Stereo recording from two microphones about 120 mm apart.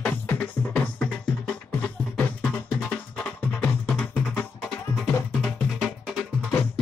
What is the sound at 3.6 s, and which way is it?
Music, 15° left (ahead or behind).